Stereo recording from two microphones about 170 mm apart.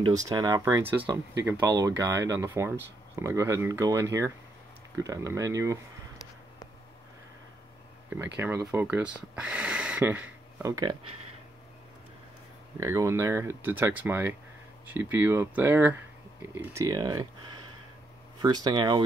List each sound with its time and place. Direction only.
0.0 s speech: 20° right (ahead or behind)
8.4 s speech: 15° right (ahead or behind)
12.8 s speech: 20° right (ahead or behind)